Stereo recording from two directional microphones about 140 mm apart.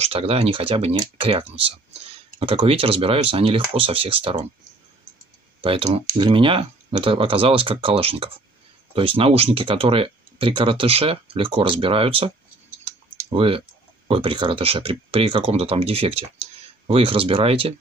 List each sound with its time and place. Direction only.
0.0 s speech: 45° right (ahead or behind)
5.6 s speech: 40° right (ahead or behind)
13.3 s speech: 40° right (ahead or behind)